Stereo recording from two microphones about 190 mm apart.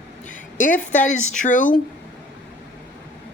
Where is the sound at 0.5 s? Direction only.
45° left (ahead or behind).